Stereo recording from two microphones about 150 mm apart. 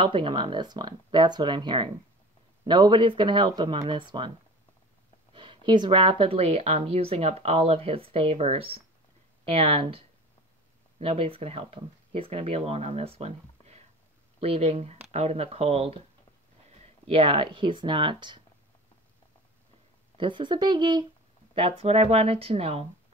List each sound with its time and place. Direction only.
0.0 s speech: 35° right (ahead or behind)
5.3 s speech: 35° right (ahead or behind)
20.2 s speech: 30° right (ahead or behind)
21.5 s speech: 40° right (ahead or behind)